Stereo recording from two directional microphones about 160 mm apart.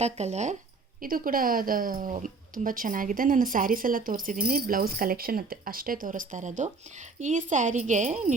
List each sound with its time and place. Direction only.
0.0 s speech: 45° right (ahead or behind)
1.0 s speech: 60° right (ahead or behind)